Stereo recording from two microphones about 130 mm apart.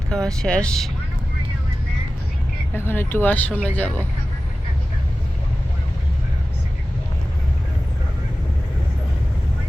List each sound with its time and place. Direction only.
0.1 s speech: 5° left (ahead or behind)
2.7 s speech: 15° left (ahead or behind)